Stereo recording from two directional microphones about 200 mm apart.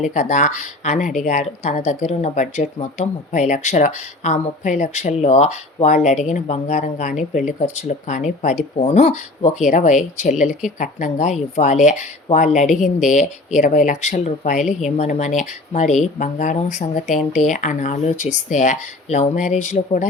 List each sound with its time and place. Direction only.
0.1 s speech: 35° left (ahead or behind)